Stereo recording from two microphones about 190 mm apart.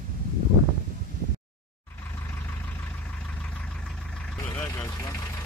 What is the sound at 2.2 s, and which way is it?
Vehicle, 10° left (ahead or behind).